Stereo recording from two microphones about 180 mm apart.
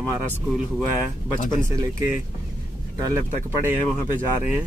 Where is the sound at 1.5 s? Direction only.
15° right (ahead or behind).